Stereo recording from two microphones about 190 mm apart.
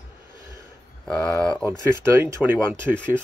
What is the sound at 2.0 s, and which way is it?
Speech, 10° right (ahead or behind).